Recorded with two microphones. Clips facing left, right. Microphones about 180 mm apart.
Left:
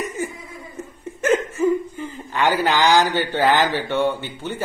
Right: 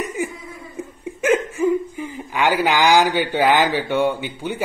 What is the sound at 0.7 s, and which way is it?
Speech, 10° right (ahead or behind).